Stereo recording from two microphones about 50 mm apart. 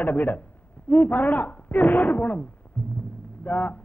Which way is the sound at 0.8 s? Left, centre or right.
Left.